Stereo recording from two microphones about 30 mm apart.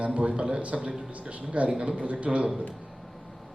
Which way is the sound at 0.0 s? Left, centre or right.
Right.